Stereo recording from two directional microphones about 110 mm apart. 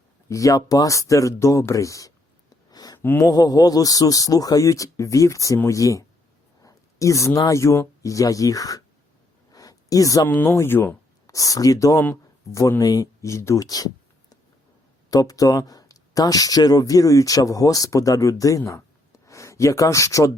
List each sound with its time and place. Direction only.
0.3 s a man's voice: 30° left (ahead or behind)
2.6 s a sound: 35° left (ahead or behind)
3.0 s speech: 20° left (ahead or behind)
3.2 s a man's voice: 35° left (ahead or behind)
9.5 s a sound: 35° left (ahead or behind)
10.2 s speech: 20° left (ahead or behind); by 13.9 s 35° left (ahead or behind)
15.1 s speech: 35° left (ahead or behind)